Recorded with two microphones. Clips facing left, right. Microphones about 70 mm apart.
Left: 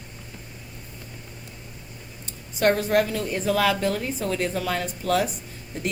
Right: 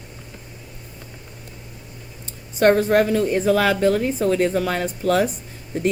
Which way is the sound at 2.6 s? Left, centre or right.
Right.